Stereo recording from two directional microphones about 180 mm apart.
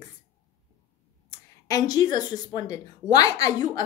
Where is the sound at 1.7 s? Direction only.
20° left (ahead or behind).